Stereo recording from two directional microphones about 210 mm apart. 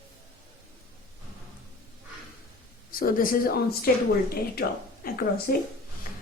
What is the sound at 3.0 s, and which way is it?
Speech, 45° left (ahead or behind).